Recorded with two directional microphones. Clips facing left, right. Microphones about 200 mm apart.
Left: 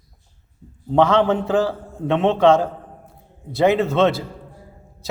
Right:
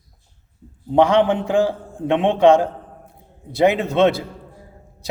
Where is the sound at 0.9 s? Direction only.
15° right (ahead or behind).